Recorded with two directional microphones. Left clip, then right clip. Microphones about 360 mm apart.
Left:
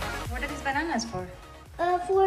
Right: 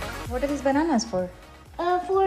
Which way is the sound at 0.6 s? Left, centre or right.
Centre.